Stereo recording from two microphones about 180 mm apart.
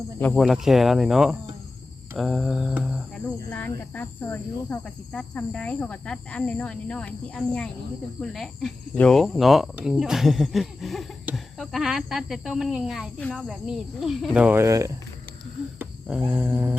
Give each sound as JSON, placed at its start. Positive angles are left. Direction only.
{"t": 0.3, "sound": "speech", "side_deg": 0}
{"t": 3.2, "sound": "cricket", "side_deg": 5}
{"t": 8.2, "sound": "speech", "side_deg": 0}
{"t": 15.8, "sound": "a sound", "side_deg": -5}